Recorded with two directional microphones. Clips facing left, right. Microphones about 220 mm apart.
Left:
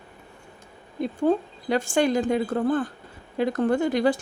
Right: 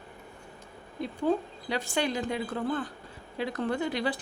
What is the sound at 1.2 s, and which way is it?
A woman's voice, 50° left (ahead or behind).